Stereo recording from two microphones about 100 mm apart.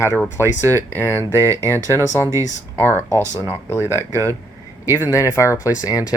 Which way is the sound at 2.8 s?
20° left (ahead or behind).